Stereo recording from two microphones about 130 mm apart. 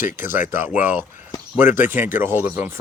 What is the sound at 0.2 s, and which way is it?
Speech, 15° right (ahead or behind).